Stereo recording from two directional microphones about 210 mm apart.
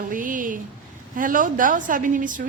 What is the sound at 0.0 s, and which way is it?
A woman's voice, 40° right (ahead or behind).